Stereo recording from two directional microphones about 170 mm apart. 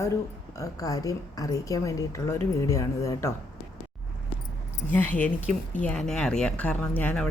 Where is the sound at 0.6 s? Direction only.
20° left (ahead or behind).